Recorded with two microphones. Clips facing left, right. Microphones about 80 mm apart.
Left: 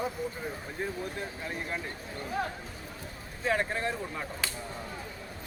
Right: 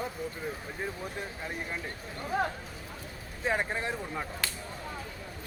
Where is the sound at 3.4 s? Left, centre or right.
Centre.